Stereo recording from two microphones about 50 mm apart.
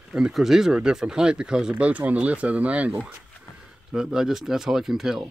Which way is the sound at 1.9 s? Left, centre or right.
Right.